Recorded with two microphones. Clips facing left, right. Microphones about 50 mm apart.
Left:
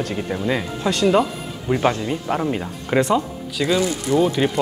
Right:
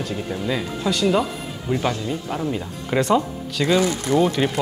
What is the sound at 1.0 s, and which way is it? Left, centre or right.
Speech, centre.